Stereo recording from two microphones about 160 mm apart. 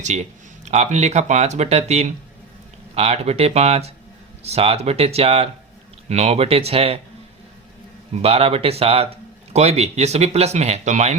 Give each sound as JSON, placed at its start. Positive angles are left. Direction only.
{"t": 0.6, "sound": "speech", "side_deg": -45}
{"t": 8.2, "sound": "speech", "side_deg": -40}